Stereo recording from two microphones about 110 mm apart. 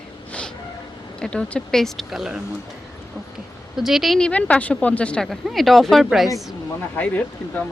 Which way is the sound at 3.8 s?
5° right (ahead or behind).